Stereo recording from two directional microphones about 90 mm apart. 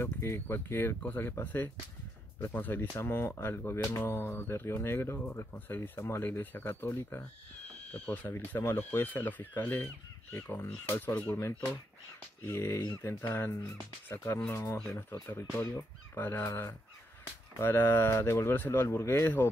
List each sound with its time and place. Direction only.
0.0 s speech: 30° left (ahead or behind)